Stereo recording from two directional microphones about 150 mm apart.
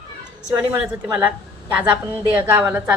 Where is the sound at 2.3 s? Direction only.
15° right (ahead or behind).